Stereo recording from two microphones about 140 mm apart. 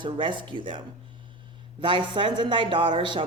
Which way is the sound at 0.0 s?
35° right (ahead or behind).